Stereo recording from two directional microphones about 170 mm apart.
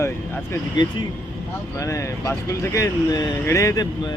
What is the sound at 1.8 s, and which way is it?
Speech, 20° left (ahead or behind).